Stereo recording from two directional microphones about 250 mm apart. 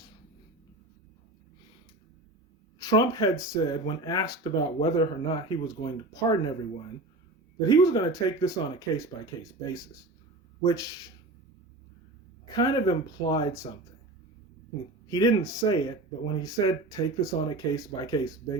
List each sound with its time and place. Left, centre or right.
2.7 s speech: centre
7.7 s speech: centre
12.5 s speech: centre
15.1 s speech: centre